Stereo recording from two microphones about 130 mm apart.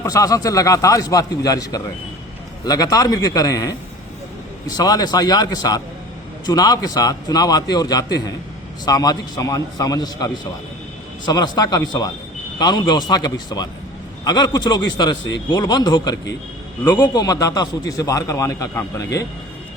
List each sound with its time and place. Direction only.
0.0 s a man's voice: 25° left (ahead or behind)